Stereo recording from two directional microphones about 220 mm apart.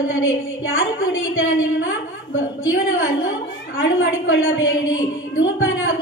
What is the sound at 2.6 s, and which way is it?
A woman's voice, 65° left (ahead or behind).